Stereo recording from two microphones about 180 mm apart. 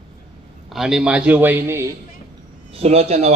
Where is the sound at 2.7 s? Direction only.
35° right (ahead or behind).